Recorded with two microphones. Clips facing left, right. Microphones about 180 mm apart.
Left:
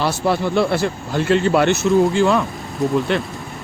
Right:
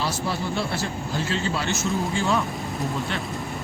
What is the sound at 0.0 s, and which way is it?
Speech, 65° left (ahead or behind).